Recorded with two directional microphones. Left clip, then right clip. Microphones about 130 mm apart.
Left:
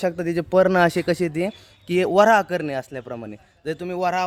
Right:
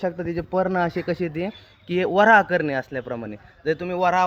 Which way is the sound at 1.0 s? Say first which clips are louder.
Left 4 dB; 85° left.